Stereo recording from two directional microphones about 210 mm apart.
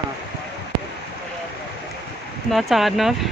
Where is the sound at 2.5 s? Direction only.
Centre (ahead or behind).